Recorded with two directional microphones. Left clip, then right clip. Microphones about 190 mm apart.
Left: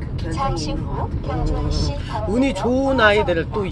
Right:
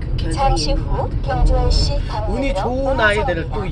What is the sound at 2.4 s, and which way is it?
Speech, 40° left (ahead or behind).